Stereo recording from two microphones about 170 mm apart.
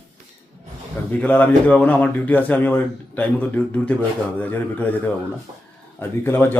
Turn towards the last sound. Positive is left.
turn(degrees=15)  # may be behind; listen again after turning